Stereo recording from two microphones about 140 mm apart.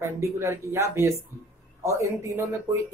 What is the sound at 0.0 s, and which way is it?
Speech, 20° right (ahead or behind).